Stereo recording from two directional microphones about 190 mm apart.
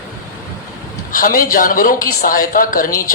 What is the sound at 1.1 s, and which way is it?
A woman's voice, 45° left (ahead or behind).